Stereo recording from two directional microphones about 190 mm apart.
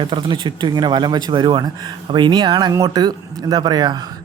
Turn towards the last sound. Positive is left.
turn(degrees=-20)  # may be behind; listen again after turning